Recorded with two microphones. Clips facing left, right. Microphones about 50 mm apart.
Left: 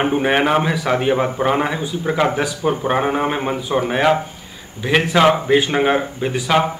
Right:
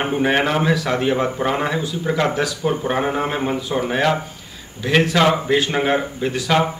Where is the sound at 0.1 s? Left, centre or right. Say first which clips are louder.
Left 2 dB; centre.